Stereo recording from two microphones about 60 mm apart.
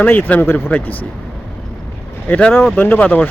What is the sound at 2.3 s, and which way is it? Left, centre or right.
Speech, left.